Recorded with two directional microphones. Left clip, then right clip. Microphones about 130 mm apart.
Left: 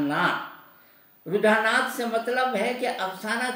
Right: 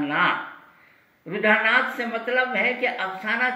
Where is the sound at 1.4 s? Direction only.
35° left (ahead or behind).